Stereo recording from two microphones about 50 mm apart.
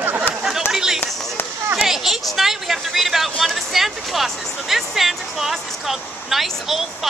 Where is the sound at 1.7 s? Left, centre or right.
Centre.